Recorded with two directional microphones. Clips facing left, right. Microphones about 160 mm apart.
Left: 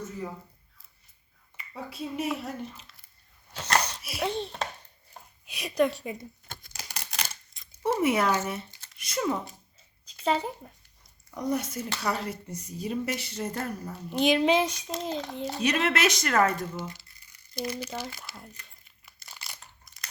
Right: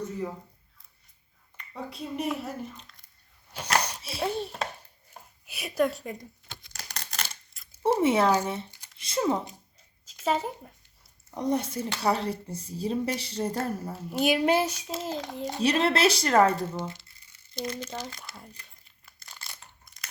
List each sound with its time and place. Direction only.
1.5 s speech: 5° left (ahead or behind)
3.5 s a sound: 10° right (ahead or behind)
4.2 s speech: 10° right (ahead or behind)
5.2 s a sound: 5° right (ahead or behind)
5.5 s speech: 5° right (ahead or behind)
6.5 s tearing: 50° left (ahead or behind)
6.7 s a sound: 5° left (ahead or behind)
7.8 s speech: 30° right (ahead or behind)
9.7 s a sound: 5° right (ahead or behind)
11.3 s speech: 30° right (ahead or behind)
13.9 s speech: 5° right (ahead or behind)
15.6 s speech: 30° right (ahead or behind)
17.5 s speech: 10° left (ahead or behind)
19.0 s crunch: centre (ahead or behind)